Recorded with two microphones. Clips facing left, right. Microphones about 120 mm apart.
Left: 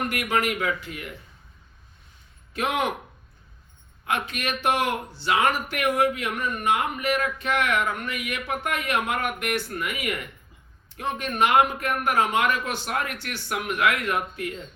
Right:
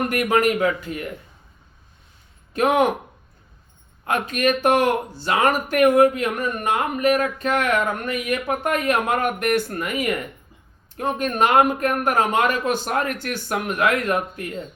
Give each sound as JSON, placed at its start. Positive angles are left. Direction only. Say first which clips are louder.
{"t": 0.1, "sound": "a man's voice", "louder": "right 6 dB", "side_deg": -45}
{"t": 2.5, "sound": "speech", "louder": "right 8 dB", "side_deg": -45}
{"t": 4.0, "sound": "a man's voice", "louder": "right 7 dB", "side_deg": -45}